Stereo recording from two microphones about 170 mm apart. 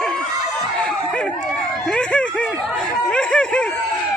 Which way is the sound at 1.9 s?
5° left (ahead or behind).